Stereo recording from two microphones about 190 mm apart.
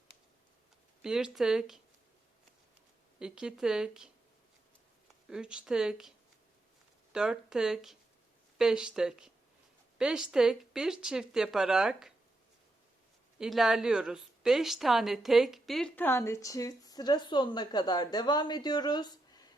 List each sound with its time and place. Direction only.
1.0 s speech: 5° right (ahead or behind)
3.2 s speech: 5° right (ahead or behind)
5.3 s speech: 5° right (ahead or behind)
13.4 s a woman's voice: centre (ahead or behind); by 19.5 s 20° left (ahead or behind)